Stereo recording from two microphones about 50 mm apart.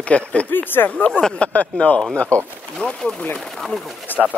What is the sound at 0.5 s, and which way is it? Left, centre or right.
Speech, left.